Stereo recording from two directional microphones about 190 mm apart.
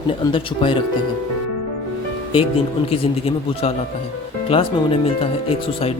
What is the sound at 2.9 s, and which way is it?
Speech, 30° left (ahead or behind).